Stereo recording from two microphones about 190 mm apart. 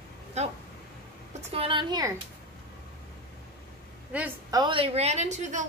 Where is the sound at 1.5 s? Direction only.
30° right (ahead or behind).